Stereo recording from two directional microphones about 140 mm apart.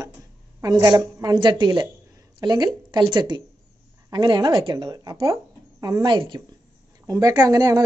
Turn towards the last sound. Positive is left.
turn(degrees=-25)  # may be behind; listen again after turning